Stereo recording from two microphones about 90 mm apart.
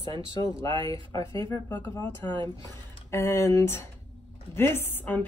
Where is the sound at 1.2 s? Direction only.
65° right (ahead or behind).